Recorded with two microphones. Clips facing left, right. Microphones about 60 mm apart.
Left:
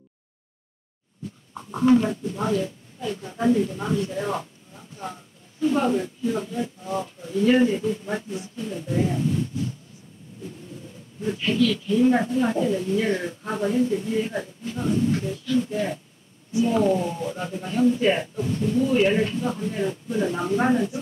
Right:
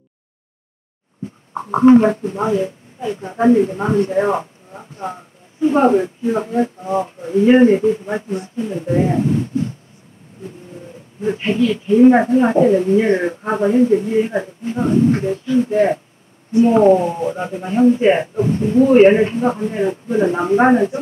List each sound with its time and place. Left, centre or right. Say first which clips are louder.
1.5 s a sound: right 10 dB; right
1.9 s speech: right 9 dB; right
2.4 s speech: right 6 dB; right
15.7 s speech: right 12 dB; right